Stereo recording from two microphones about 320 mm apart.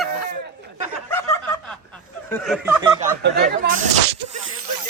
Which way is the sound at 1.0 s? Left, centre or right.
Centre.